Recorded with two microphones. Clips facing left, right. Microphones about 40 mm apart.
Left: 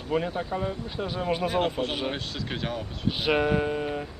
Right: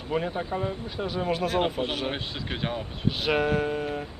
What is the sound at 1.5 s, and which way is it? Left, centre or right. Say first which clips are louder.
Speech: even; centre.